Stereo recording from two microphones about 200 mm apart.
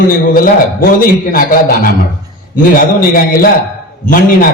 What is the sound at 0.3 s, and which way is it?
A man's voice, 45° left (ahead or behind).